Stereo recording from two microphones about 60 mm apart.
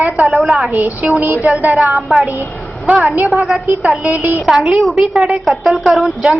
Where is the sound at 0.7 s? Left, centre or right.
Right.